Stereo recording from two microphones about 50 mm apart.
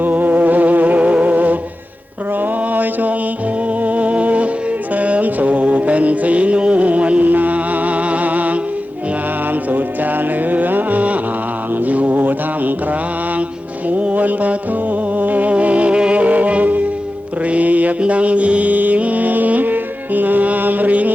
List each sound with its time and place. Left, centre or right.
0.0 s music: right
2.4 s mantra: right
3.8 s music: right
11.9 s mantra: right
13.8 s music: right